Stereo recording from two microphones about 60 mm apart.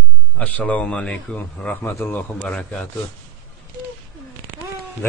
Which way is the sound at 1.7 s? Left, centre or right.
Left.